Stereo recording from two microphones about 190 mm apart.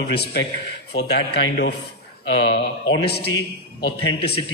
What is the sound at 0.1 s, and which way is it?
Speech, 60° left (ahead or behind).